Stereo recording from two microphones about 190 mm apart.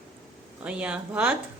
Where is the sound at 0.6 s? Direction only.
5° right (ahead or behind).